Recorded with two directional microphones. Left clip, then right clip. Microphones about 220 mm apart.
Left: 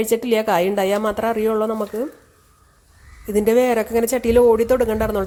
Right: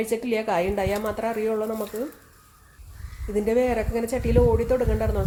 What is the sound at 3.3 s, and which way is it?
Speech, 40° left (ahead or behind).